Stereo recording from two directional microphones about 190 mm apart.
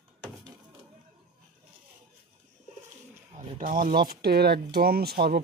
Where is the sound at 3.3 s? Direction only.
35° right (ahead or behind).